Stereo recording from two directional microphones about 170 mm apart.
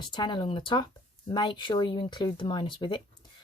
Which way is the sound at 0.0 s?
25° left (ahead or behind).